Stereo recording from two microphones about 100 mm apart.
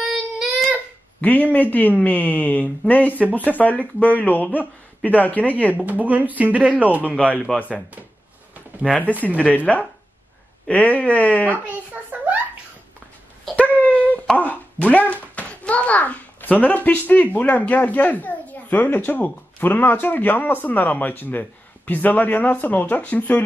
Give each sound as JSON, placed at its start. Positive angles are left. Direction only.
{"t": 0.0, "sound": "child singing", "side_deg": -5}
{"t": 1.2, "sound": "speech", "side_deg": 15}
{"t": 5.9, "sound": "speech", "side_deg": -15}
{"t": 7.5, "sound": "speech", "side_deg": 10}
{"t": 8.5, "sound": "a sound", "side_deg": -10}
{"t": 9.4, "sound": "speech", "side_deg": 15}
{"t": 11.6, "sound": "a sound", "side_deg": -15}
{"t": 13.6, "sound": "wail", "side_deg": 15}
{"t": 14.3, "sound": "a child's voice", "side_deg": 15}